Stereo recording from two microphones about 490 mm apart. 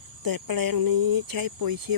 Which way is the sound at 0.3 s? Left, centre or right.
Right.